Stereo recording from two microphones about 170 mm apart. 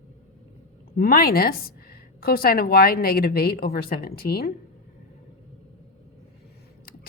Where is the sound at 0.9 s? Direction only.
65° left (ahead or behind).